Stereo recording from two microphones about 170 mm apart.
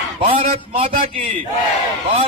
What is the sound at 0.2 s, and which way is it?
Speech, 30° right (ahead or behind).